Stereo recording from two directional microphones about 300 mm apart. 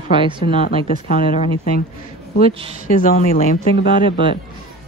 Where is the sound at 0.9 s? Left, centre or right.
Left.